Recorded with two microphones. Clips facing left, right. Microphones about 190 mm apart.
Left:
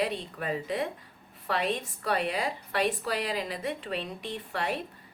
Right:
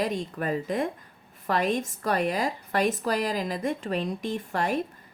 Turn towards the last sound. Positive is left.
turn(degrees=-45)  # may be behind; listen again after turning